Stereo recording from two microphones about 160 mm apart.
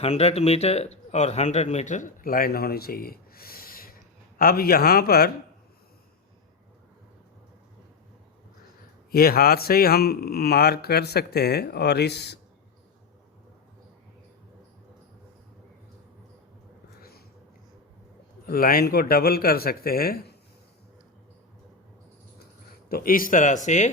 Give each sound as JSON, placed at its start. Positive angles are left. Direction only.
{"t": 0.0, "sound": "speech", "side_deg": 40}
{"t": 9.1, "sound": "speech", "side_deg": 70}
{"t": 17.0, "sound": "a sound", "side_deg": 75}
{"t": 18.4, "sound": "speech", "side_deg": 65}
{"t": 22.9, "sound": "a man's voice", "side_deg": 65}